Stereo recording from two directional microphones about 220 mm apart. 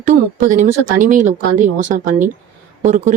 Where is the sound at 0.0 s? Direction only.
35° right (ahead or behind).